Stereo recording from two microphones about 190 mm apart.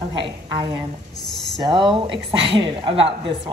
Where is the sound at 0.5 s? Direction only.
25° right (ahead or behind).